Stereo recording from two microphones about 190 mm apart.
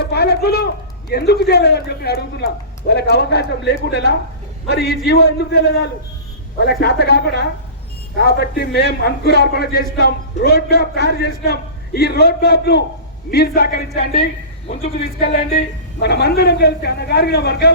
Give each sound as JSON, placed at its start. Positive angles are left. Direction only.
{"t": 0.0, "sound": "a man's voice", "side_deg": 60}
{"t": 15.2, "sound": "a man's voice", "side_deg": 55}